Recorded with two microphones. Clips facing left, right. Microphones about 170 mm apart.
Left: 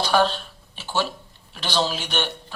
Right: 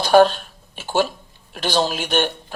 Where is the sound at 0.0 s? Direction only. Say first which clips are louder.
Right 7 dB; 45° right (ahead or behind).